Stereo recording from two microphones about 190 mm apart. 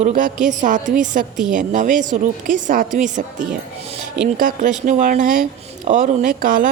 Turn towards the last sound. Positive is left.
turn(degrees=-45)  # may be behind; listen again after turning